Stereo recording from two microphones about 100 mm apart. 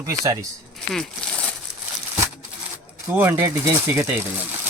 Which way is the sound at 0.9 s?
10° left (ahead or behind).